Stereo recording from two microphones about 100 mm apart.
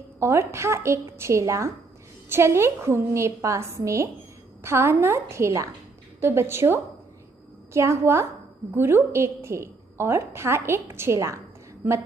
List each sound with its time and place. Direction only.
0.2 s a woman's voice: 30° right (ahead or behind)